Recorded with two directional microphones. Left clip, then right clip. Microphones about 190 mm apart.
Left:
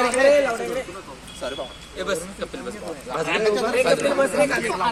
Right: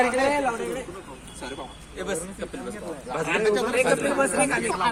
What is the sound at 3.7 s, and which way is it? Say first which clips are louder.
Speech: left 3 dB; 40° right (ahead or behind).